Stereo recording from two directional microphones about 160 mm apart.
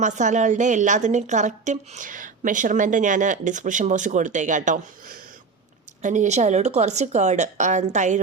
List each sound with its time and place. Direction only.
0.0 s a woman's voice: 50° right (ahead or behind)